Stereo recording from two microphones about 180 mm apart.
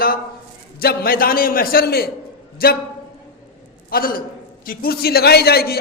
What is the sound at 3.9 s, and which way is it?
A man's voice, 55° left (ahead or behind).